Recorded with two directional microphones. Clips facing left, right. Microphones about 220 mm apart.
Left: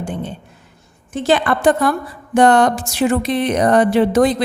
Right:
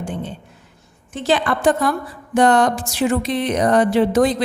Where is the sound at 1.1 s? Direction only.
55° left (ahead or behind).